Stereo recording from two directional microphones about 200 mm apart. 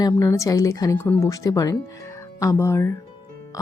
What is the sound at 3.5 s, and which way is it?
Music, 15° left (ahead or behind).